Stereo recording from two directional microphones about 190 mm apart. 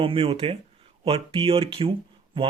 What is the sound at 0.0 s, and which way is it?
Speech, 30° right (ahead or behind).